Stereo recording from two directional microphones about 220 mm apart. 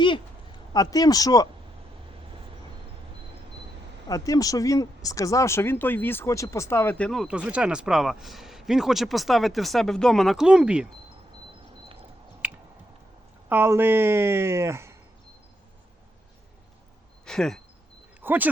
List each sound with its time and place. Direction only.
0.7 s speech: 15° left (ahead or behind)
4.1 s speech: 15° left (ahead or behind); by 10.8 s 5° right (ahead or behind)
13.5 s speech: 10° right (ahead or behind)
17.2 s speech: centre (ahead or behind)
18.2 s a sound: 10° right (ahead or behind)